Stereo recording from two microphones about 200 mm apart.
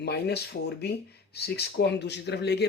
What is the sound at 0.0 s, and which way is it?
Speech, 55° left (ahead or behind).